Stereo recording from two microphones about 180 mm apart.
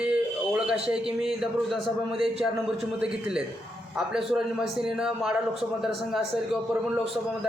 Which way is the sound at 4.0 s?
5° right (ahead or behind).